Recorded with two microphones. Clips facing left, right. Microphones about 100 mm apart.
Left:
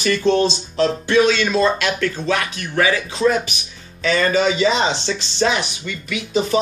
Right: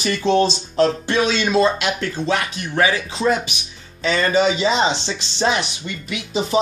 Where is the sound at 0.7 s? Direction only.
35° right (ahead or behind).